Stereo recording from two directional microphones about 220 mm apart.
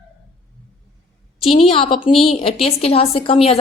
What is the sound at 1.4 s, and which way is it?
Speech, 25° left (ahead or behind).